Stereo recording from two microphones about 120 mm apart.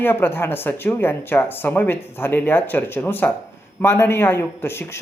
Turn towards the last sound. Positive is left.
turn(degrees=20)  # may be behind; listen again after turning